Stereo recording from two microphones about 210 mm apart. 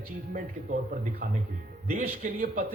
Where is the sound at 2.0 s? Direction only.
40° right (ahead or behind).